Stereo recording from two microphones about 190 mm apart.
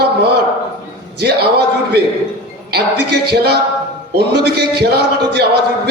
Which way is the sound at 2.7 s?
60° right (ahead or behind).